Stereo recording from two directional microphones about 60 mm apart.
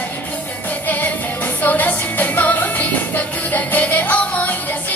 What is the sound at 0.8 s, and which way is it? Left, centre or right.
Music, left.